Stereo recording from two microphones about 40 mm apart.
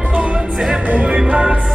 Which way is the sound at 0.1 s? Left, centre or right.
Right.